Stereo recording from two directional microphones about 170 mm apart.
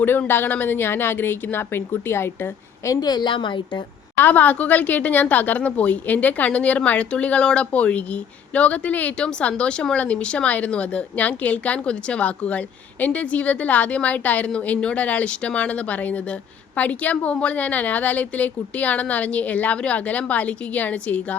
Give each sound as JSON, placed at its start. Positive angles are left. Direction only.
{"t": 0.0, "sound": "speech", "side_deg": 10}
{"t": 4.2, "sound": "speech", "side_deg": 10}